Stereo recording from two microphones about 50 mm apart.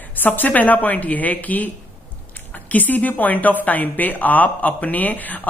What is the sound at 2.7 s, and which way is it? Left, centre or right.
A woman's voice, left.